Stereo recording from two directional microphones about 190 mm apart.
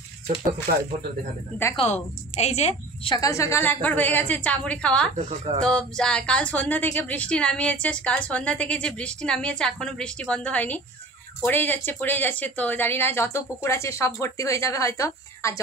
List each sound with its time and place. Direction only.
2.3 s a woman's voice: 35° left (ahead or behind); by 5.1 s 5° left (ahead or behind)
5.1 s speech: 35° right (ahead or behind)
5.6 s a woman's voice: 5° left (ahead or behind)